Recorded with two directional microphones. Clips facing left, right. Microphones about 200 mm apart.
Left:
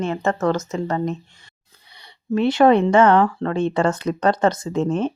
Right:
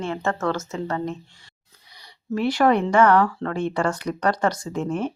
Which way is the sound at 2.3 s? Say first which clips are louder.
Left 5 dB; 25° left (ahead or behind).